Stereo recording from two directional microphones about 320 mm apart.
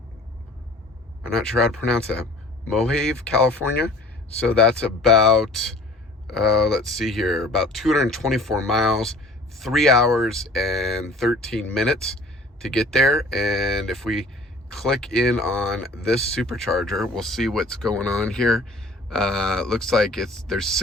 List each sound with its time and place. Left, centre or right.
1.2 s speech: centre